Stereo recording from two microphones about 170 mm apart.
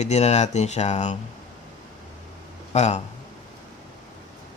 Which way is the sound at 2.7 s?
40° left (ahead or behind).